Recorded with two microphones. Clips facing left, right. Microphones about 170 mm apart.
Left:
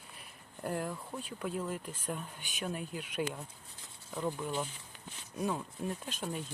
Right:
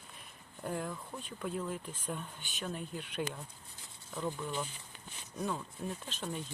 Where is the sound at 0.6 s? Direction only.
5° left (ahead or behind).